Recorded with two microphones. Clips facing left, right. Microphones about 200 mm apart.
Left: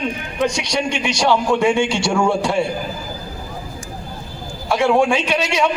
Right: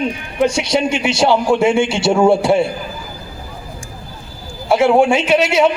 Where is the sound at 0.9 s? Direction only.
25° right (ahead or behind).